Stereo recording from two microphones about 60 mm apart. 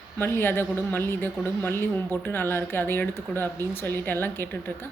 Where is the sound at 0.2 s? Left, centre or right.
Left.